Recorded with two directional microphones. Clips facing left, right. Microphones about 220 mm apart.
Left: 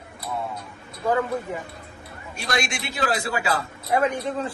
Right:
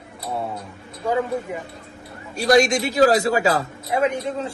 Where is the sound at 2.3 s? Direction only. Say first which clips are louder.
Right 11 dB; 40° right (ahead or behind).